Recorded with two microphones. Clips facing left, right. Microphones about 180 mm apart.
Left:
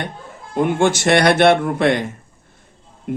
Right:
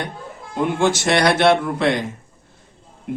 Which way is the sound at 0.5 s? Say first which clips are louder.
Left 2 dB; 55° left (ahead or behind).